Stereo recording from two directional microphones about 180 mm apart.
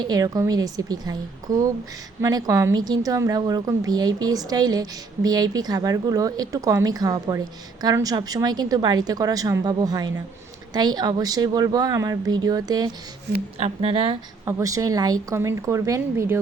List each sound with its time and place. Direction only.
0.0 s a woman's voice: 20° right (ahead or behind)
13.6 s a woman's voice: 35° right (ahead or behind)
14.4 s speech: 20° right (ahead or behind)